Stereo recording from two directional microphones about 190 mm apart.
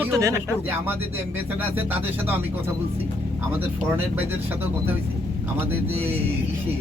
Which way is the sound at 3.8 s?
10° right (ahead or behind).